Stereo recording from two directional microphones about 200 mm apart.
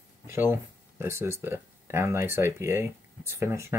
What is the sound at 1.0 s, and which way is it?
Speech, 10° right (ahead or behind).